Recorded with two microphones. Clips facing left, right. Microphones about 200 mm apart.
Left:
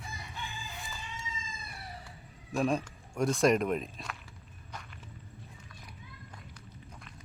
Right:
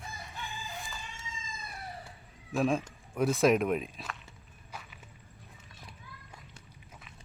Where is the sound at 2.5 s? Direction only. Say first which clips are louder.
Right 1 dB; centre (ahead or behind).